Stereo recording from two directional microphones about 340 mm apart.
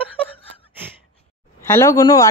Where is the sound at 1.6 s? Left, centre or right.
Centre.